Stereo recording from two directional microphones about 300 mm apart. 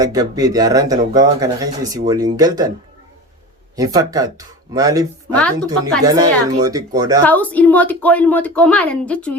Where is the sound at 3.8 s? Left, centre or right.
Centre.